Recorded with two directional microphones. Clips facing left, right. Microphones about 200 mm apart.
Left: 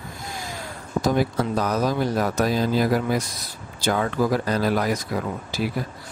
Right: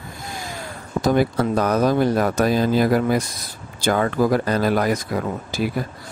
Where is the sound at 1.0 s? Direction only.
60° right (ahead or behind).